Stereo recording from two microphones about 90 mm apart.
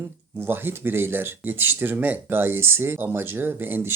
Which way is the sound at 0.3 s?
25° right (ahead or behind).